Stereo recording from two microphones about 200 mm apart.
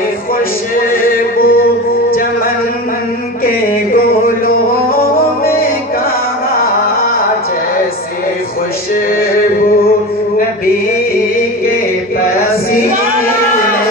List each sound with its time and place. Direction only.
1.0 s music: 45° left (ahead or behind)
3.4 s music: 45° left (ahead or behind)